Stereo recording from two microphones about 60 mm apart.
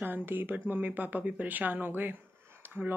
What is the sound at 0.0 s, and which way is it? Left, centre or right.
Speech, right.